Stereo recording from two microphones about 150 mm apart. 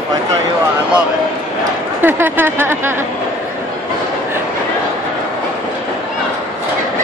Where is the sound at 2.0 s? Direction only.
15° right (ahead or behind).